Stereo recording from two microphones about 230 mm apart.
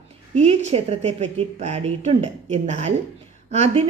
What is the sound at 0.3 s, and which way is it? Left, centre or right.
A woman's voice, right.